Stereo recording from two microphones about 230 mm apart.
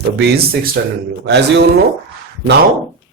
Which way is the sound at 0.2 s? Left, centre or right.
Right.